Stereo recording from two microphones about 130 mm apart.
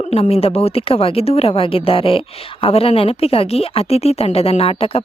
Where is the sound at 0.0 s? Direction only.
50° left (ahead or behind).